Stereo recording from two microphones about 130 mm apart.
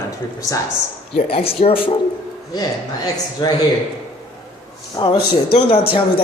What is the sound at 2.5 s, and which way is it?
A man's voice, 30° left (ahead or behind).